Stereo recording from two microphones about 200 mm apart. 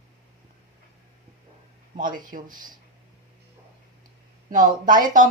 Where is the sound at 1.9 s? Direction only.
40° right (ahead or behind).